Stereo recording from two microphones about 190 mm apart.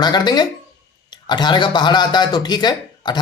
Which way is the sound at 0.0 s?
20° left (ahead or behind).